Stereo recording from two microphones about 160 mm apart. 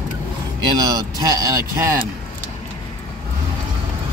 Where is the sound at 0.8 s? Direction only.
25° right (ahead or behind).